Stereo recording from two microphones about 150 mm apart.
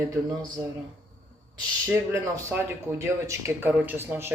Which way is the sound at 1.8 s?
15° right (ahead or behind).